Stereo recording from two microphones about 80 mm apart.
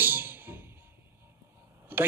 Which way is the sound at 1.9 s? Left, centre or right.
Right.